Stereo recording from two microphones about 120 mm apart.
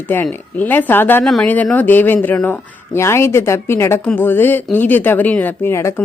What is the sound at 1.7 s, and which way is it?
A woman's voice, 15° left (ahead or behind).